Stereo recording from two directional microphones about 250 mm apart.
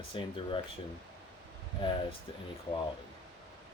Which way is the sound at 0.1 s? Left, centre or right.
Left.